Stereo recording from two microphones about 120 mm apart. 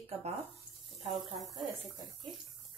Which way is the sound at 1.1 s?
Centre (ahead or behind).